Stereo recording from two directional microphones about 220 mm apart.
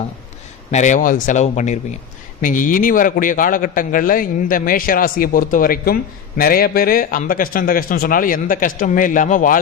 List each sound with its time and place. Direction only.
0.7 s a man's voice: 35° left (ahead or behind)